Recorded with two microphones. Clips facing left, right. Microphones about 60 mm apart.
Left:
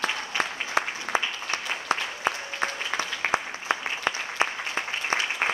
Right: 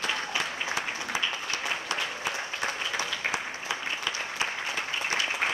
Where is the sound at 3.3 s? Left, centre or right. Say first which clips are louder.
Left 5 dB; left.